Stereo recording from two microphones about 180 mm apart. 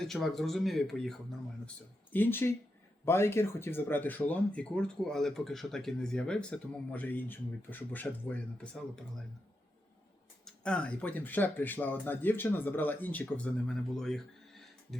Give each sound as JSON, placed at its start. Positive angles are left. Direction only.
{"t": 0.0, "sound": "speech", "side_deg": 0}
{"t": 10.4, "sound": "speech", "side_deg": 5}